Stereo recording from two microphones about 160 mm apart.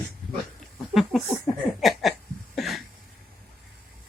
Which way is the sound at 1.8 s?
Centre (ahead or behind).